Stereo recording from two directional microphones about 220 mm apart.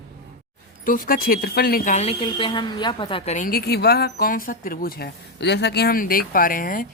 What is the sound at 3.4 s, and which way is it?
A woman's voice, 40° left (ahead or behind).